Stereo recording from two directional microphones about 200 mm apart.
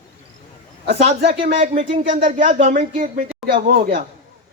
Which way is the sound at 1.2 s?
30° right (ahead or behind).